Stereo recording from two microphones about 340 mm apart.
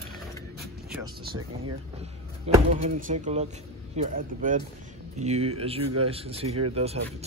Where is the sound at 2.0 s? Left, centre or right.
Centre.